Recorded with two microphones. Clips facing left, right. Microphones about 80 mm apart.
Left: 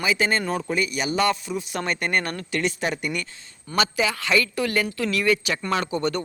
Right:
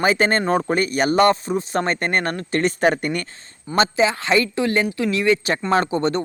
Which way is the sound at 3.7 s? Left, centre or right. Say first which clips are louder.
Right 5 dB; right.